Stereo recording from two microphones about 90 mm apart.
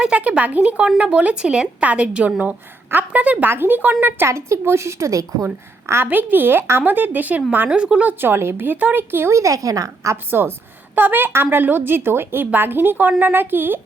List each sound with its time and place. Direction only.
0.0 s speech: 15° right (ahead or behind)
4.3 s a woman's voice: 35° right (ahead or behind)
6.1 s speech: 20° right (ahead or behind)
10.9 s speech: 20° right (ahead or behind)